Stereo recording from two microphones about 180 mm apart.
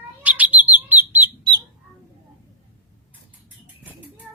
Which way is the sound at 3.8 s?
10° right (ahead or behind).